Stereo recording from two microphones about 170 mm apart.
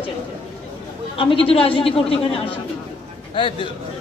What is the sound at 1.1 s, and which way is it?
A man's voice, 35° left (ahead or behind).